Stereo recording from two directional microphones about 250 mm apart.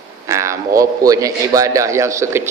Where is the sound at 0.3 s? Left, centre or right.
Centre.